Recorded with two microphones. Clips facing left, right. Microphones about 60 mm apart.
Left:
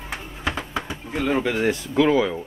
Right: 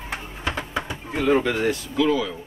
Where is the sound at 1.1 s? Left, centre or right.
Centre.